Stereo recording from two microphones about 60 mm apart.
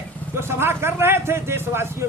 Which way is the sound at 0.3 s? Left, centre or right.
Right.